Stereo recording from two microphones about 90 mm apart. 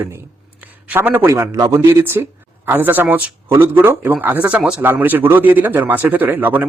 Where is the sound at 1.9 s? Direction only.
25° right (ahead or behind).